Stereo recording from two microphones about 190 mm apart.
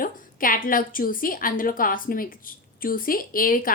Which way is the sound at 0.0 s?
45° left (ahead or behind).